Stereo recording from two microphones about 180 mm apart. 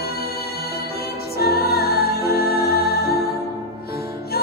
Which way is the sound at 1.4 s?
60° left (ahead or behind).